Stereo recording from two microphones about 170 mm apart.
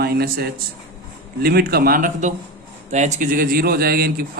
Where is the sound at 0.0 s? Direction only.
65° right (ahead or behind).